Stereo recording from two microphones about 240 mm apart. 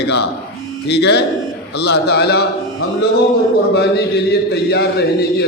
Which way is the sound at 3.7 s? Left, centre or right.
Left.